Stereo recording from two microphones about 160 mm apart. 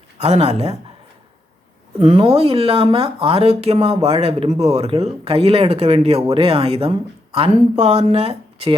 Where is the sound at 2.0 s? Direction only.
40° right (ahead or behind).